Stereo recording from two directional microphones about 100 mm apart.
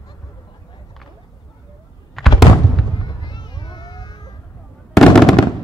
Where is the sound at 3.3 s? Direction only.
50° left (ahead or behind).